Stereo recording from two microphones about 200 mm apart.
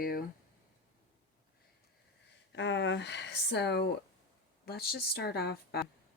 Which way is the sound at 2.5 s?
60° left (ahead or behind).